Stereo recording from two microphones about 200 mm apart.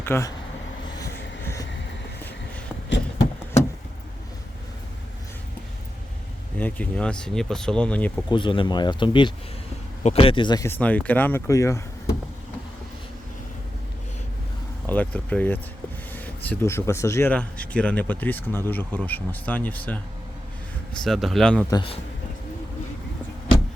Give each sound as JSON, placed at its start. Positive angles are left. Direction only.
{"t": 0.0, "sound": "speech", "side_deg": 15}
{"t": 6.6, "sound": "speech", "side_deg": 5}
{"t": 8.3, "sound": "speech", "side_deg": 25}
{"t": 14.8, "sound": "speech", "side_deg": 5}
{"t": 21.7, "sound": "speech", "side_deg": 20}